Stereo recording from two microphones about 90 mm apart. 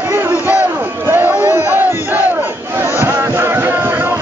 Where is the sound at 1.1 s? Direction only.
20° right (ahead or behind).